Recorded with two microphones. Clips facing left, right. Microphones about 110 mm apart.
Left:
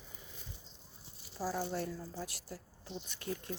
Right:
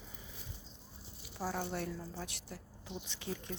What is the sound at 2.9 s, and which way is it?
Speech, 15° right (ahead or behind).